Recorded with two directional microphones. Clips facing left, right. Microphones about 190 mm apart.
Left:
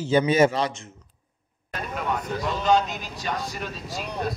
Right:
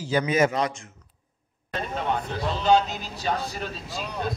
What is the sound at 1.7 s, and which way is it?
Speech, 30° right (ahead or behind).